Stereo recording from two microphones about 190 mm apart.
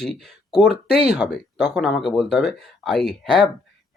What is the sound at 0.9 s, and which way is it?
Speech, 55° left (ahead or behind).